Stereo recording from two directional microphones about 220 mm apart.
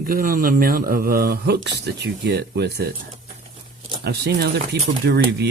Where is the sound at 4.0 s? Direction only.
45° right (ahead or behind).